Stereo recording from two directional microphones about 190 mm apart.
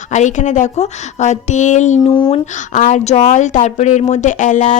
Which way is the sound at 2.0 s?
30° left (ahead or behind).